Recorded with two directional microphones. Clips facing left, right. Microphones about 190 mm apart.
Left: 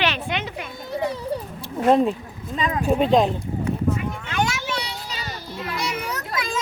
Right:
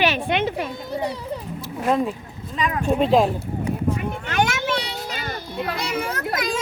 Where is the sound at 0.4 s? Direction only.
35° right (ahead or behind).